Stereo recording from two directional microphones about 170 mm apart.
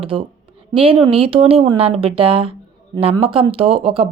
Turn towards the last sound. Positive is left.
turn(degrees=-35)  # may be behind; listen again after turning